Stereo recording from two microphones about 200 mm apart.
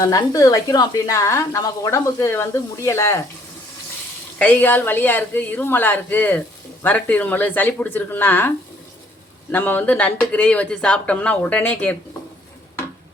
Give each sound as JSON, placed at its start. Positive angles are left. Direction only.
{"t": 0.0, "sound": "speech", "side_deg": 15}
{"t": 4.4, "sound": "speech", "side_deg": 10}